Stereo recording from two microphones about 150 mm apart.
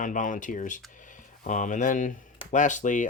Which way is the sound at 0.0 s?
60° left (ahead or behind).